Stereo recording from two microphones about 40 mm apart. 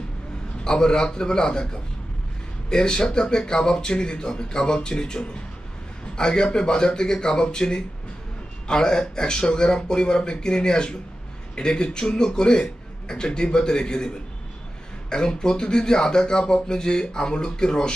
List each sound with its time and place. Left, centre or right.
0.7 s speech: centre